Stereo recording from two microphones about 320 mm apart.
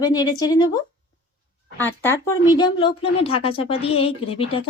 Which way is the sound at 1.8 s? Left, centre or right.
Centre.